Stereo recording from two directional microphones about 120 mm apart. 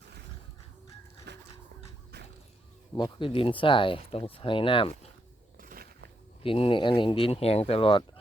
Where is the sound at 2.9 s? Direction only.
45° left (ahead or behind).